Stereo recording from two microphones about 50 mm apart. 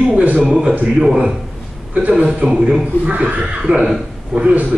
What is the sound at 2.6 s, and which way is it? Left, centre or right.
Speech, centre.